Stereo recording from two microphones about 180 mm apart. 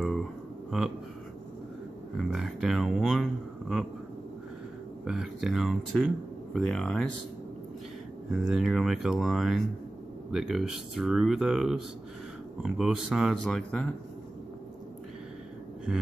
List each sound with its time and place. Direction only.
0.0 s a sound: centre (ahead or behind)
2.1 s speech: centre (ahead or behind)
5.0 s speech: 5° right (ahead or behind)
8.3 s speech: 5° right (ahead or behind)